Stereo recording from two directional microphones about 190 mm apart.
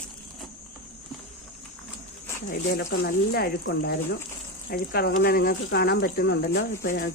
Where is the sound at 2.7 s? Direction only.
55° left (ahead or behind).